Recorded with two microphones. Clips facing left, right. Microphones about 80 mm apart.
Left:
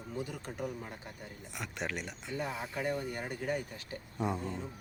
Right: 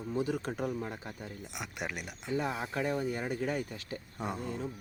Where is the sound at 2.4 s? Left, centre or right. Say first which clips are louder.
Right 3 dB; right.